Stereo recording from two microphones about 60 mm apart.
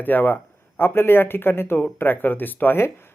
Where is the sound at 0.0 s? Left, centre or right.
Left.